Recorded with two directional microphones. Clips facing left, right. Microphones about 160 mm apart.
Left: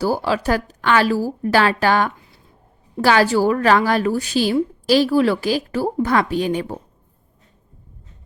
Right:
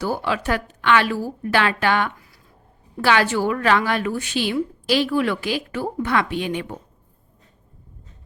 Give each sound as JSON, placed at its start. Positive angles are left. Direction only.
{"t": 0.0, "sound": "a woman's voice", "side_deg": 35}